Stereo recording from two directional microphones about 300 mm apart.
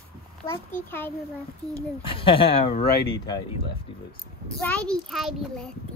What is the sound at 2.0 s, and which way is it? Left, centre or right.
Speech, centre.